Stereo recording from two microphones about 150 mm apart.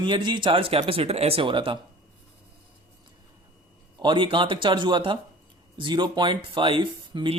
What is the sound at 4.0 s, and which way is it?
Speech, 35° right (ahead or behind).